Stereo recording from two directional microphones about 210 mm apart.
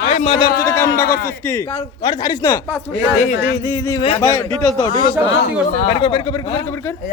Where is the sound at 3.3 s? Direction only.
60° left (ahead or behind).